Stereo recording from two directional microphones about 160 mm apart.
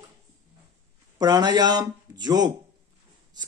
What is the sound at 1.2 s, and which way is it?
Speech, 25° right (ahead or behind).